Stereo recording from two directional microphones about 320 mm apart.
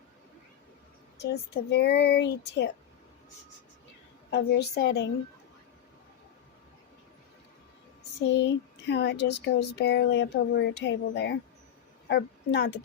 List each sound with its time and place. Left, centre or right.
1.2 s speech: left
4.3 s speech: left
8.3 s speech: left